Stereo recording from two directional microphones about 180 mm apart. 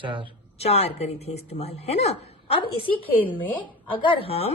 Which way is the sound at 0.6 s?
35° left (ahead or behind).